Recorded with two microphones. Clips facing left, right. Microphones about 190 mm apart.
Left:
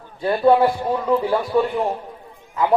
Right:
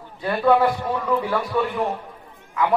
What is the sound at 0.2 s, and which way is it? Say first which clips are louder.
A man's voice: left 3 dB; 30° left (ahead or behind).